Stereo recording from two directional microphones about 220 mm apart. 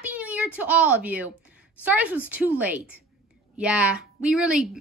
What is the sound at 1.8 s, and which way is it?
A woman's voice, 5° right (ahead or behind).